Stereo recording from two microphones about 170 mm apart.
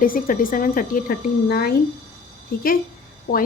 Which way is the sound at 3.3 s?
50° left (ahead or behind).